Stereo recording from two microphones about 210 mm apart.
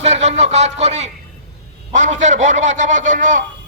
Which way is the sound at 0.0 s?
30° right (ahead or behind).